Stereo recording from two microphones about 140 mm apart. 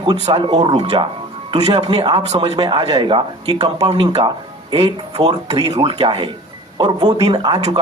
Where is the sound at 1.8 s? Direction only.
35° right (ahead or behind).